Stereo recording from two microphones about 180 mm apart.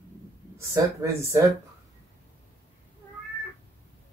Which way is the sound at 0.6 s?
15° right (ahead or behind).